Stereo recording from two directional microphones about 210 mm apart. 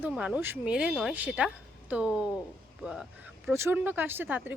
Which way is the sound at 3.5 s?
10° right (ahead or behind).